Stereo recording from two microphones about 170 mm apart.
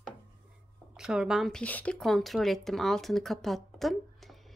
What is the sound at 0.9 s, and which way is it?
Speech, 5° right (ahead or behind).